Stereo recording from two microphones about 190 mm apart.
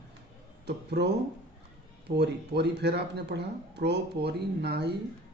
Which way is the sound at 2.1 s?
60° right (ahead or behind).